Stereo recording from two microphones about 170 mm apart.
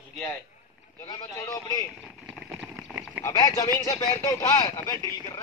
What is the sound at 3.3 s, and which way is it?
Speech, 20° left (ahead or behind).